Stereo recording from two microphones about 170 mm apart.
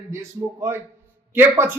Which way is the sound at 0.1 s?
15° right (ahead or behind).